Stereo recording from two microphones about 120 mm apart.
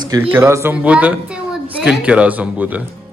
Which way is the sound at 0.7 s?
10° right (ahead or behind).